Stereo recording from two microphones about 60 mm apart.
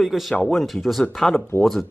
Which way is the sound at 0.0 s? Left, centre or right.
Centre.